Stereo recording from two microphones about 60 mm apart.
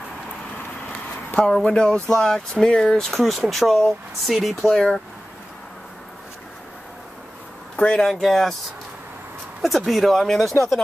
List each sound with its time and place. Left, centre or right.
1.5 s speech: centre
4.6 s speech: centre
7.7 s speech: centre
9.6 s speech: centre